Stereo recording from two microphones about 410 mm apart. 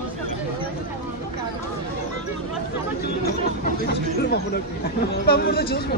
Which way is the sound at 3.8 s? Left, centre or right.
Left.